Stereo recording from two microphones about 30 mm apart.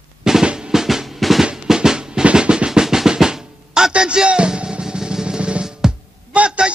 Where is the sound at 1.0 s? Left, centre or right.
Centre.